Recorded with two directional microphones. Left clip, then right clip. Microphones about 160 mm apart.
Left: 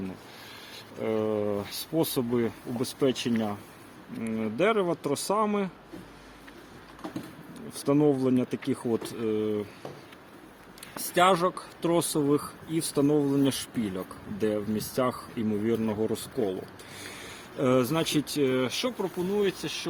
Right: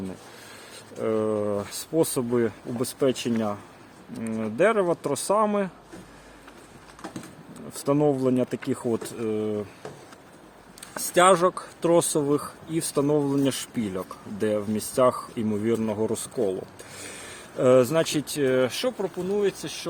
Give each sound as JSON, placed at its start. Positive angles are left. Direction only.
{"t": 1.0, "sound": "speech", "side_deg": -50}
{"t": 7.7, "sound": "speech", "side_deg": -80}
{"t": 10.9, "sound": "speech", "side_deg": -90}